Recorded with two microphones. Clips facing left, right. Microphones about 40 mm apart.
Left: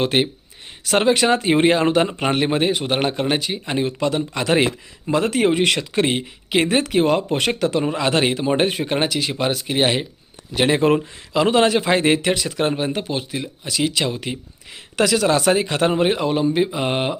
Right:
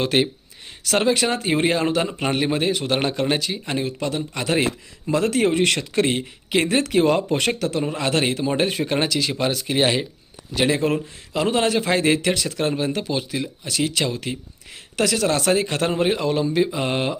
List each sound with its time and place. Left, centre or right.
0.0 s speech: centre
1.0 s a man's voice: left
2.1 s speech: left
2.4 s a man's voice: left
5.0 s speech: left
6.8 s speech: centre
7.6 s speech: left; by 10.1 s centre
10.7 s a man's voice: left
13.1 s speech: centre
13.7 s a man's voice: left